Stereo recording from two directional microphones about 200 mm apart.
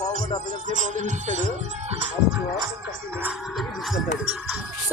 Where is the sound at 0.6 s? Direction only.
40° right (ahead or behind).